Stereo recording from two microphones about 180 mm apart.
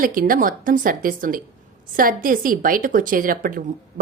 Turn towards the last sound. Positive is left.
turn(degrees=-50)  # may be behind; listen again after turning